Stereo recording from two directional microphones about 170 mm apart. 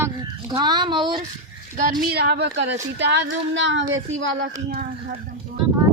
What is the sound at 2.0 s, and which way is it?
Speech, 70° right (ahead or behind).